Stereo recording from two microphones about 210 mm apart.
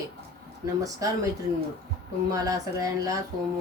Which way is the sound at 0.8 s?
15° right (ahead or behind).